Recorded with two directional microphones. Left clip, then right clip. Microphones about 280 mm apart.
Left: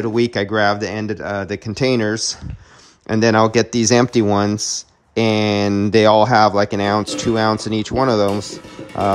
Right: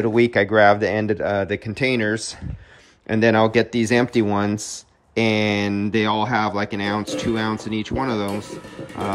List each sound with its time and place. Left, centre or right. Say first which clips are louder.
0.0 s speech: right 1 dB; centre